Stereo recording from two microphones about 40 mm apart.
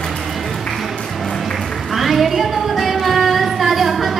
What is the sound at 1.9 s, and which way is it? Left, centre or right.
Female singing, centre.